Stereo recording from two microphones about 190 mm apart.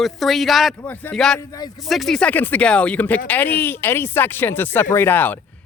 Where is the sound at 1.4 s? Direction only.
20° left (ahead or behind).